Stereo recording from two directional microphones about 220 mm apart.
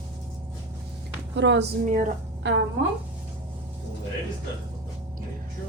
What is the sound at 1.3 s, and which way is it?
Speech, 55° right (ahead or behind).